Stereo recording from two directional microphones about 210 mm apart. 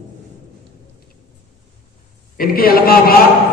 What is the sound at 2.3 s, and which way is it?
Speech, 45° left (ahead or behind).